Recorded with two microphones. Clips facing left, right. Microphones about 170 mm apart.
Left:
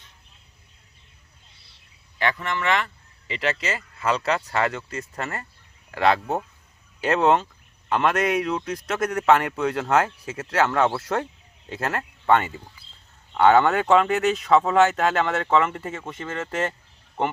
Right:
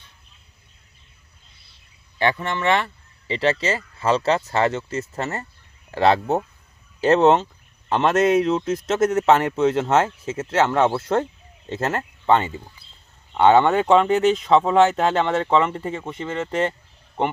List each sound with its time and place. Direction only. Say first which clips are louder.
2.1 s a man's voice: right 3 dB; 30° right (ahead or behind)